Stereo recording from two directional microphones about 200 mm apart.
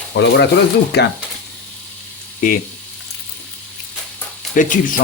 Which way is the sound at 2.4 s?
45° left (ahead or behind).